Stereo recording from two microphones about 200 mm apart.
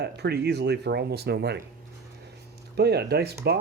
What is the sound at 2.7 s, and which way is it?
Speech, 55° right (ahead or behind).